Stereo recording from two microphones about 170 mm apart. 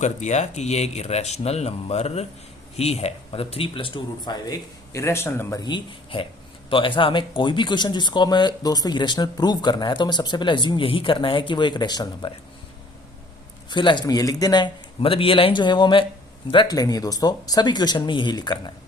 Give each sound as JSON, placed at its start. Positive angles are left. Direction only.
{"t": 0.0, "sound": "speech", "side_deg": 45}
{"t": 13.7, "sound": "speech", "side_deg": 25}